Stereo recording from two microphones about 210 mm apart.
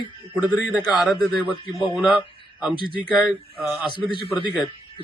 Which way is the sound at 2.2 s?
5° right (ahead or behind).